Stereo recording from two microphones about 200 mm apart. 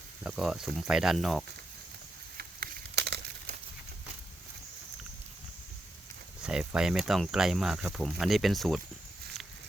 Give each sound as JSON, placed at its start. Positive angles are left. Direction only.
{"t": 0.2, "sound": "speech", "side_deg": -5}
{"t": 2.4, "sound": "a sound", "side_deg": -55}
{"t": 6.4, "sound": "speech", "side_deg": -5}